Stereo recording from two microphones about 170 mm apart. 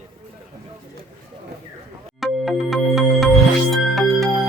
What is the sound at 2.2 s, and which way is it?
Music, centre (ahead or behind).